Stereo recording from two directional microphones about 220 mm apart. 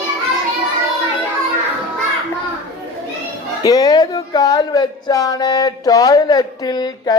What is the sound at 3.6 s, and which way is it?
Speech, 15° left (ahead or behind).